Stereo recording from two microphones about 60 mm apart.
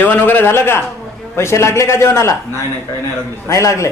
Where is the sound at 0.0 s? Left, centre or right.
Left.